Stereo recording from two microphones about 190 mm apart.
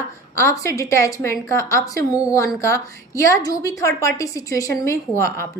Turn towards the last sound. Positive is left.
turn(degrees=15)  # may be behind; listen again after turning